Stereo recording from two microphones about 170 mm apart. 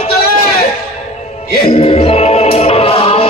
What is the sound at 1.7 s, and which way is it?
Music, 35° left (ahead or behind).